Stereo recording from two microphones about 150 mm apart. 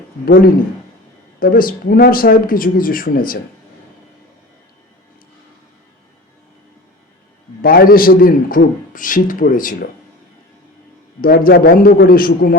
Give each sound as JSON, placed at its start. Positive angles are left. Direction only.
{"t": 1.4, "sound": "a man's voice", "side_deg": 70}
{"t": 7.6, "sound": "a man's voice", "side_deg": 75}
{"t": 11.2, "sound": "a man's voice", "side_deg": 80}